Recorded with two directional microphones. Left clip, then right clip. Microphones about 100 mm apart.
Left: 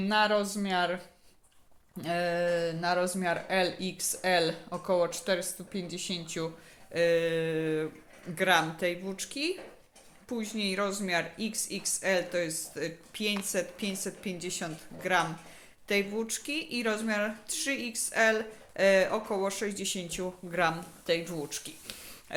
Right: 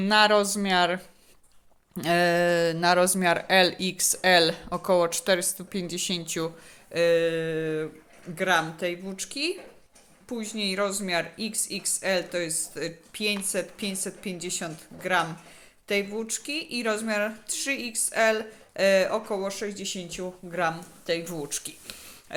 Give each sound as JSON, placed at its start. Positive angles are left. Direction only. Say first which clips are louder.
{"t": 0.0, "sound": "speech", "louder": "right 6 dB", "side_deg": -50}
{"t": 2.0, "sound": "speech", "louder": "right 7 dB", "side_deg": -70}
{"t": 6.9, "sound": "speech", "louder": "right 4 dB", "side_deg": -35}
{"t": 19.5, "sound": "speech", "louder": "right 1 dB", "side_deg": -5}
{"t": 21.2, "sound": "speech", "louder": "right 3 dB", "side_deg": -30}
{"t": 21.9, "sound": "a sound", "louder": "right 1 dB", "side_deg": -15}